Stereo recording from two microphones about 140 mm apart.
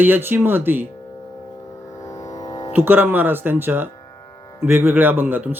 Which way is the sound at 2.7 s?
15° right (ahead or behind).